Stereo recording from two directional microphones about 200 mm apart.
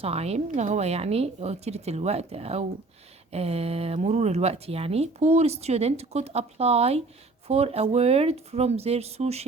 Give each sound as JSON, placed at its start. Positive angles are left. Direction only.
{"t": 0.0, "sound": "speech", "side_deg": -30}